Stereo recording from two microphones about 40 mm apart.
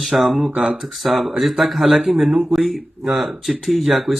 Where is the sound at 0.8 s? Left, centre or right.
Centre.